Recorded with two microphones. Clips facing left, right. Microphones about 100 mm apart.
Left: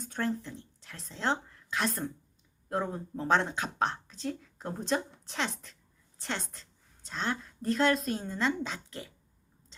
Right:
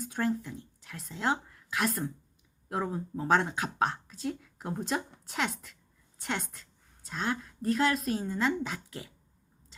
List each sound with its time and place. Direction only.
0.0 s a woman's voice: 10° right (ahead or behind)